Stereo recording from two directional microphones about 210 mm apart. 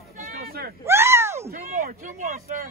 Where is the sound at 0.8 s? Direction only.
10° right (ahead or behind).